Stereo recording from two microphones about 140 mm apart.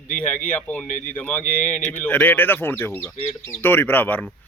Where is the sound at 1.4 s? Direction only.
65° left (ahead or behind).